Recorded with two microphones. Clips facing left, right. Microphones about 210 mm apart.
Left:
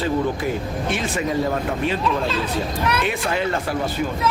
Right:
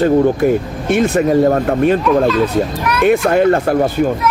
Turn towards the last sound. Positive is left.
turn(degrees=-55)  # may be behind; listen again after turning